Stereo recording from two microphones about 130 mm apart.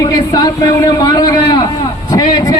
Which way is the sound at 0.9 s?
30° left (ahead or behind).